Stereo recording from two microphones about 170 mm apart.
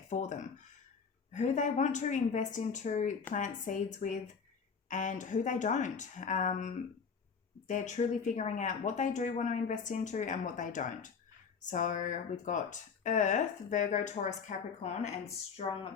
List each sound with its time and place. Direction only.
0.1 s speech: 45° left (ahead or behind)